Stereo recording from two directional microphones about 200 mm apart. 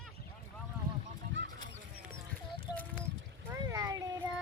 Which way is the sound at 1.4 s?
70° right (ahead or behind).